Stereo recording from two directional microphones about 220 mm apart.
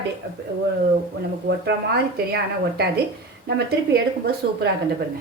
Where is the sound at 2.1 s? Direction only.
45° right (ahead or behind).